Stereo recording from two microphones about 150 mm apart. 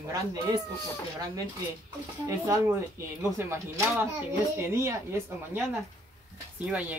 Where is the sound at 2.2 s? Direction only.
20° right (ahead or behind).